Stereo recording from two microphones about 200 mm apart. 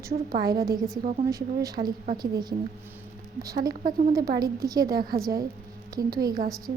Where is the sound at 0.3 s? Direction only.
45° right (ahead or behind).